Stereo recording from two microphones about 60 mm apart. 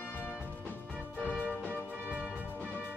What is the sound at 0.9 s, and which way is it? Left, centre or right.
Music, right.